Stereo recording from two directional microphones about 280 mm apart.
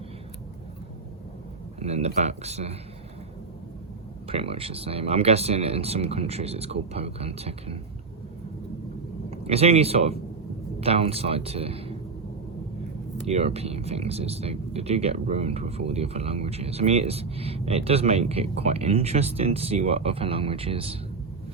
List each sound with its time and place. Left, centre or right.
1.8 s speech: right
4.3 s speech: centre
9.3 s speech: right
13.2 s speech: right